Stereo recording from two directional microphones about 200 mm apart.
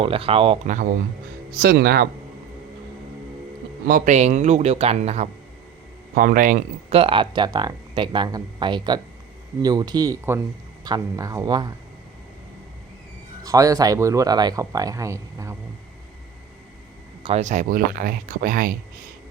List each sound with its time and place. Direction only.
0.0 s speech: 30° right (ahead or behind)
1.5 s speech: 50° right (ahead or behind)
3.8 s speech: 40° right (ahead or behind); by 11.7 s 20° right (ahead or behind)
13.4 s speech: 15° right (ahead or behind)
17.2 s speech: 35° right (ahead or behind)